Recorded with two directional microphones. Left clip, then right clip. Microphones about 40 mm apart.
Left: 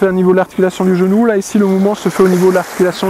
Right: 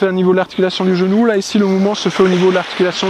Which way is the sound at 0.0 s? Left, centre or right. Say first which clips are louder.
Left 2 dB; centre.